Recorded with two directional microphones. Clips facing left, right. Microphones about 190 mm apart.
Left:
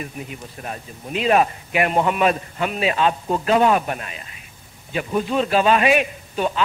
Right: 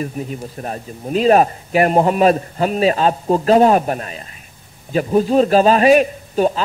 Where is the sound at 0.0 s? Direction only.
40° right (ahead or behind).